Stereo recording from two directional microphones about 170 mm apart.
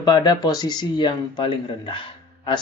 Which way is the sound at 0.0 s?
25° left (ahead or behind).